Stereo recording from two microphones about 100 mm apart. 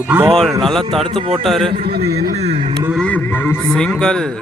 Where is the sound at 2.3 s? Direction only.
90° right.